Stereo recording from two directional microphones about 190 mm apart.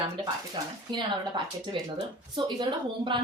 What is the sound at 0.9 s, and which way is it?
A woman's voice, 25° right (ahead or behind).